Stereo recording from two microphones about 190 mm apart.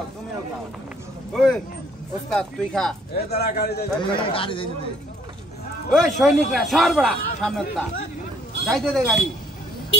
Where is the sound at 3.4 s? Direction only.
60° left (ahead or behind).